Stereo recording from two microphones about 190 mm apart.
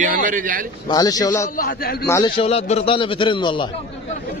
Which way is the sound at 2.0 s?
15° left (ahead or behind).